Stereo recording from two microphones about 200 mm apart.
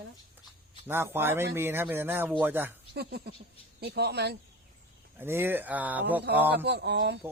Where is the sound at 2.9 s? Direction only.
50° right (ahead or behind).